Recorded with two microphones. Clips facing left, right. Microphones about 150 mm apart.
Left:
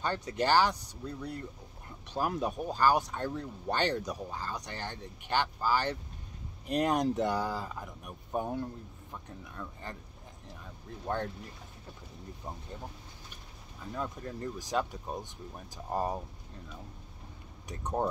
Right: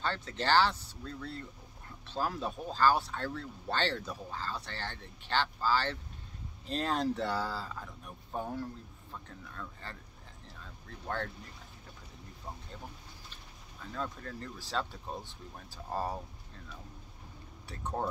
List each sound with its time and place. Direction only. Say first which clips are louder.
0.0 s speech: left 3 dB; 15° left (ahead or behind)
13.9 s speech: left 2 dB; 15° left (ahead or behind)
17.6 s speech: left 4 dB; 20° left (ahead or behind)